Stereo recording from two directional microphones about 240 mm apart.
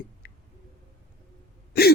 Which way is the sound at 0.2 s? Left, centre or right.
Left.